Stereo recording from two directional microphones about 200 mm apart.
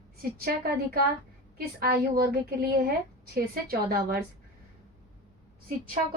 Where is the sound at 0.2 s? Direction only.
50° right (ahead or behind).